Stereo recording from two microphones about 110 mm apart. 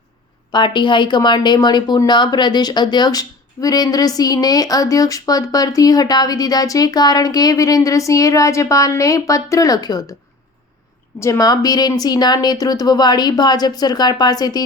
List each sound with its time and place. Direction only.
0.5 s speech: 45° left (ahead or behind)
11.2 s speech: 30° left (ahead or behind)